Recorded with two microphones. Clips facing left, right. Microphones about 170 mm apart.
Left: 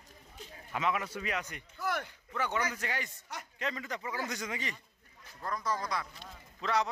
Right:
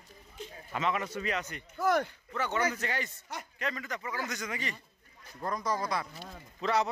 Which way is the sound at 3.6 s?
25° left (ahead or behind).